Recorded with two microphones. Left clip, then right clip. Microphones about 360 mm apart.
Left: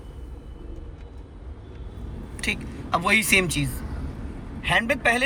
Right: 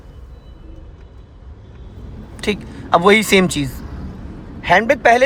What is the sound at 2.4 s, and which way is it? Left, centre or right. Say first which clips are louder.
A man's voice: right 6 dB; centre.